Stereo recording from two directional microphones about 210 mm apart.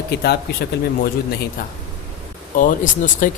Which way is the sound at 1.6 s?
40° left (ahead or behind).